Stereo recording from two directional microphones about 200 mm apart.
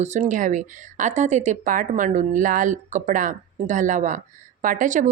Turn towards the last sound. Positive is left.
turn(degrees=-40)  # may be behind; listen again after turning